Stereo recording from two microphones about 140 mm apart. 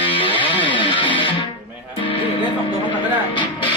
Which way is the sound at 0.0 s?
40° left (ahead or behind).